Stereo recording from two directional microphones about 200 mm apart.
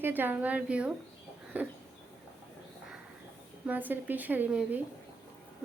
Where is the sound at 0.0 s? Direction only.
10° right (ahead or behind).